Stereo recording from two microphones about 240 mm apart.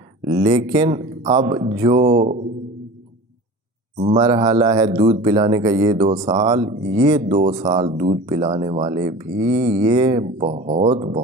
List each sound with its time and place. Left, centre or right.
0.3 s speech: centre
3.9 s speech: right
4.2 s speech: centre